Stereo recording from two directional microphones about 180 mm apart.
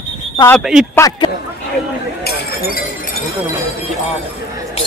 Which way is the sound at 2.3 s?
55° left (ahead or behind).